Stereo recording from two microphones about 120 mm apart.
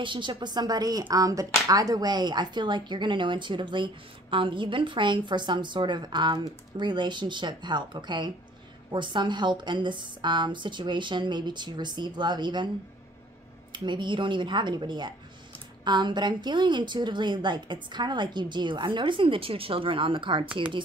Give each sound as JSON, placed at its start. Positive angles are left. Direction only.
{"t": 0.0, "sound": "a woman's voice", "side_deg": -40}
{"t": 13.7, "sound": "a woman's voice", "side_deg": -40}